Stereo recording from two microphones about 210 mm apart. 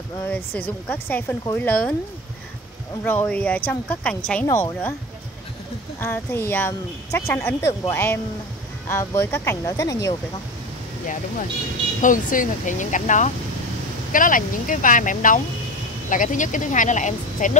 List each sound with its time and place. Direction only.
0.2 s speech: 10° left (ahead or behind)
3.0 s speech: 10° left (ahead or behind)
5.9 s speech: 10° left (ahead or behind)
12.0 s speech: 40° left (ahead or behind)